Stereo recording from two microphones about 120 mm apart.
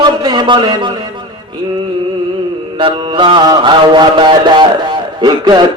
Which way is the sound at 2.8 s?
45° right (ahead or behind).